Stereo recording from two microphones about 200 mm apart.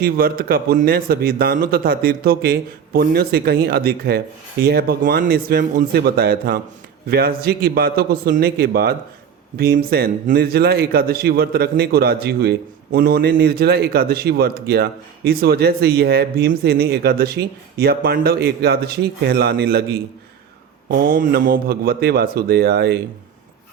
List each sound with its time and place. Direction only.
0.0 s a man's voice: 45° right (ahead or behind)